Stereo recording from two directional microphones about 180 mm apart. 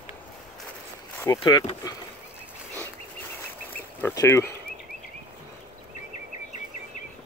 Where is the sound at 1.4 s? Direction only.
25° left (ahead or behind).